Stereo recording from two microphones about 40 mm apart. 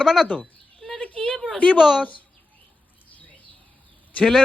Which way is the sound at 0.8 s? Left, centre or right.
Centre.